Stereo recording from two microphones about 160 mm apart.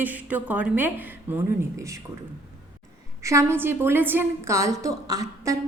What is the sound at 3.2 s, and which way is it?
A woman's voice, 15° right (ahead or behind).